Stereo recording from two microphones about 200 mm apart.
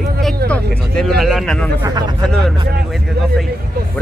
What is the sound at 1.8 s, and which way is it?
Speech, 20° right (ahead or behind).